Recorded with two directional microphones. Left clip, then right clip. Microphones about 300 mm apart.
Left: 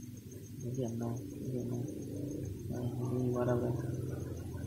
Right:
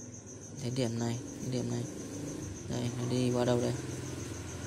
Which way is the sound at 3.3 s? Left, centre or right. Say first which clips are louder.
Right 4 dB; centre.